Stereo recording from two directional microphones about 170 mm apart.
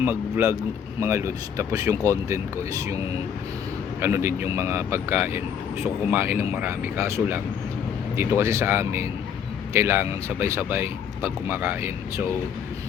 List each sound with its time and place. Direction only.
0.0 s speech: 10° right (ahead or behind)
4.0 s speech: 15° right (ahead or behind)